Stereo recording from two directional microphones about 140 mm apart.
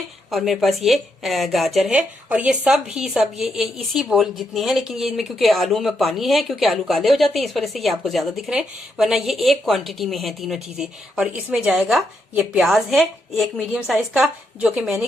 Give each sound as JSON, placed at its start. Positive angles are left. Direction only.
{"t": 0.3, "sound": "a woman's voice", "side_deg": 0}